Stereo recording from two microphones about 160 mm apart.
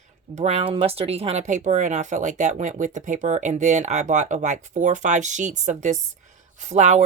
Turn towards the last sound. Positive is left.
turn(degrees=-45)  # may be behind; listen again after turning